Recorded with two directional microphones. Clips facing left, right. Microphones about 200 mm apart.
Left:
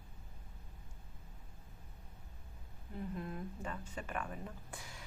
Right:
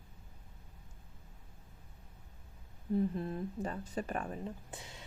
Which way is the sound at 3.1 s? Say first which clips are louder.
Right 6 dB; 30° right (ahead or behind).